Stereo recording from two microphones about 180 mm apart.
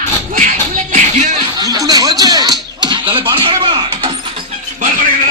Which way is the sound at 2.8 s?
25° right (ahead or behind).